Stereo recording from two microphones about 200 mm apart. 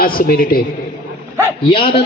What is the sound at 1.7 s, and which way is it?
Speech, 25° left (ahead or behind).